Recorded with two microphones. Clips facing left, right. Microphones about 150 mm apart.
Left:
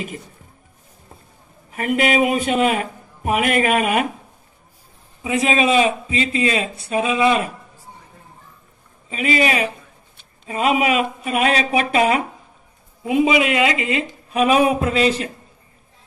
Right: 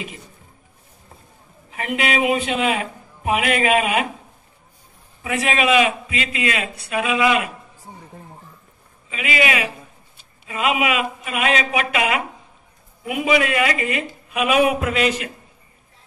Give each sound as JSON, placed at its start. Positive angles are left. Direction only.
{"t": 1.7, "sound": "speech", "side_deg": 50}
{"t": 5.2, "sound": "a man's voice", "side_deg": 20}
{"t": 9.1, "sound": "a man's voice", "side_deg": 35}